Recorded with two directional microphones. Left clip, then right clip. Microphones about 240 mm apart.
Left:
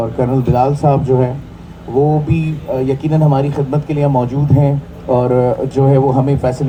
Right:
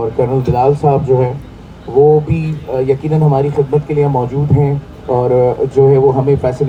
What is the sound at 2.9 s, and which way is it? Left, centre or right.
Speech, left.